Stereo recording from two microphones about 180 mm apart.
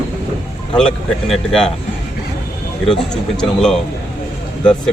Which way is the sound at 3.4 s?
5° left (ahead or behind).